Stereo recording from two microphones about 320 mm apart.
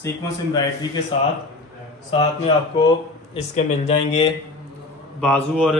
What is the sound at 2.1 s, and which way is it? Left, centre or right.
Speech, centre.